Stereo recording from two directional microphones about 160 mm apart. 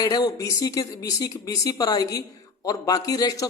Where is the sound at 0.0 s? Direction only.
25° left (ahead or behind).